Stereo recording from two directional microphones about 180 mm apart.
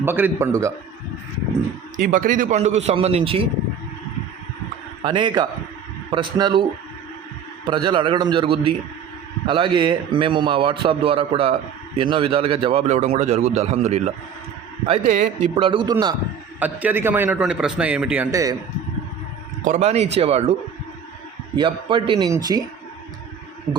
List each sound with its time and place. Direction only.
0.0 s a man's voice: 10° right (ahead or behind)
2.0 s a man's voice: 50° right (ahead or behind); by 3.4 s 35° right (ahead or behind)
5.0 s a man's voice: 25° right (ahead or behind); by 15.3 s 45° right (ahead or behind)
15.4 s a man's voice: 25° right (ahead or behind)
16.6 s a man's voice: 10° right (ahead or behind)
18.3 s a man's voice: 20° right (ahead or behind)
19.6 s a man's voice: 40° right (ahead or behind); by 22.6 s 20° right (ahead or behind)